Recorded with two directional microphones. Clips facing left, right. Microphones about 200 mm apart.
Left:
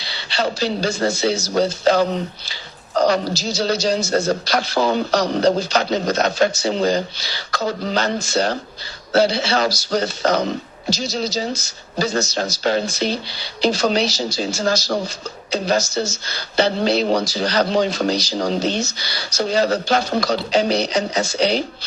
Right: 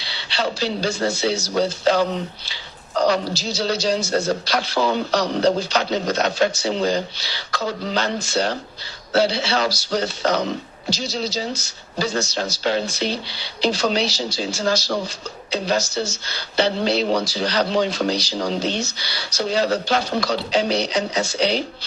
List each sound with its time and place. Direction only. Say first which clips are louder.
0.0 s speech: left 2 dB; 45° left (ahead or behind)